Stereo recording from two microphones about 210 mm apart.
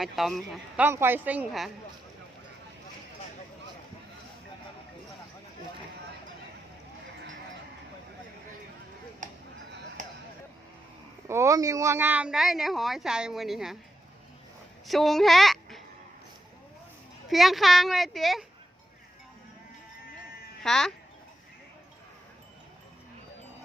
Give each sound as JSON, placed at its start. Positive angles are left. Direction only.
{"t": 0.0, "sound": "speech", "side_deg": 0}
{"t": 0.9, "sound": "a woman's voice", "side_deg": -10}
{"t": 9.2, "sound": "a sound", "side_deg": -40}
{"t": 11.3, "sound": "speech", "side_deg": -15}
{"t": 14.8, "sound": "speech", "side_deg": 0}
{"t": 17.2, "sound": "speech", "side_deg": 0}
{"t": 20.6, "sound": "speech", "side_deg": 0}